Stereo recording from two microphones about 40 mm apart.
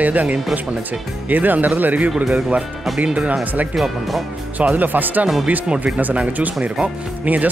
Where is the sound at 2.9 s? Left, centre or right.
Right.